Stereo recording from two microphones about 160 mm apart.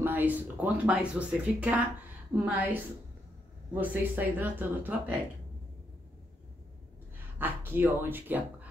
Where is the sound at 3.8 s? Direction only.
10° right (ahead or behind).